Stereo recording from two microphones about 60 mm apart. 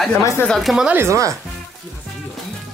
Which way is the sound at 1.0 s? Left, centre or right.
Right.